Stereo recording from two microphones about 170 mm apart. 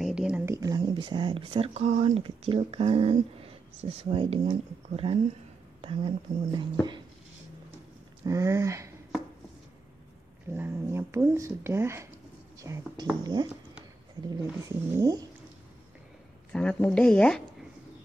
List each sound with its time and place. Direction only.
0.0 s a sound: 5° right (ahead or behind)
0.6 s speech: 20° right (ahead or behind)
8.3 s speech: 20° right (ahead or behind)
10.5 s speech: 15° right (ahead or behind)
16.5 s speech: 5° left (ahead or behind)